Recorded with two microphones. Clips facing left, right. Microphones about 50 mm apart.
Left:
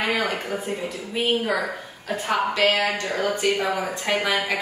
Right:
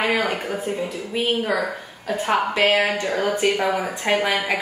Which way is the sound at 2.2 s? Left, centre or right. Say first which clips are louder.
Right 2 dB; centre.